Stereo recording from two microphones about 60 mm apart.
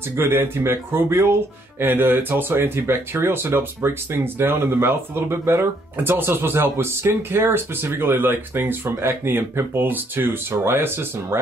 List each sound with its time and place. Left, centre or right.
0.2 s speech: right